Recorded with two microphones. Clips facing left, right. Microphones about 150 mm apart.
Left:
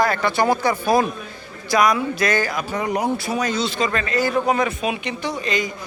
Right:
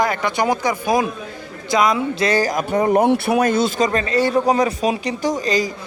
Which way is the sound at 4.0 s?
30° right (ahead or behind).